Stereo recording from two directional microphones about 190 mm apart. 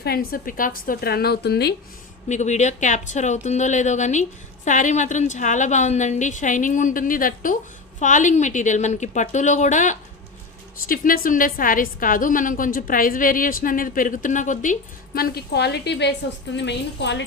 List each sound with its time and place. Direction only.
0.0 s a woman's voice: 55° left (ahead or behind)
2.3 s a woman's voice: 40° left (ahead or behind); by 17.2 s 65° left (ahead or behind)